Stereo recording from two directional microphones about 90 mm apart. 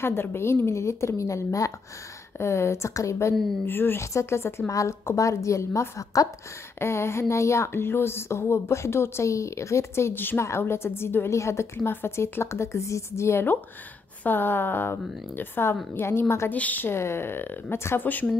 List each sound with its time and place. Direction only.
0.0 s a woman's voice: 25° left (ahead or behind)